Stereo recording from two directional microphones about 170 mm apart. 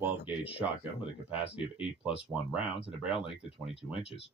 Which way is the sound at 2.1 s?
35° left (ahead or behind).